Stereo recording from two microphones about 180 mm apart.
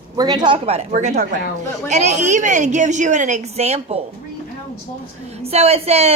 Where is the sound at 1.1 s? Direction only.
60° right (ahead or behind).